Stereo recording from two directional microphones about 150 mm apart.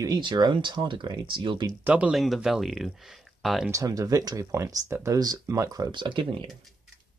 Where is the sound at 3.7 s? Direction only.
20° right (ahead or behind).